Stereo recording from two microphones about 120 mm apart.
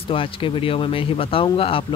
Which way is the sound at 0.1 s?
50° left (ahead or behind).